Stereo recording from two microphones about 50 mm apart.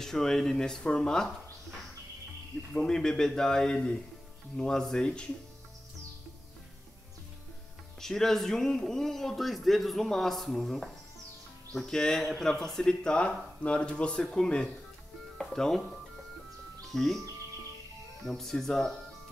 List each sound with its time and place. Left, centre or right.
0.0 s a man's voice: centre
2.7 s a man's voice: centre
8.0 s a man's voice: centre
18.3 s a man's voice: centre